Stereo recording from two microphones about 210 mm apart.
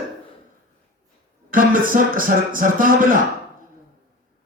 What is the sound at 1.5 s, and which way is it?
A man's voice, 40° right (ahead or behind).